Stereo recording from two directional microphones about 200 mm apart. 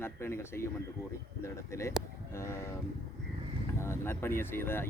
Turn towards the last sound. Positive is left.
turn(degrees=10)  # may be behind; listen again after turning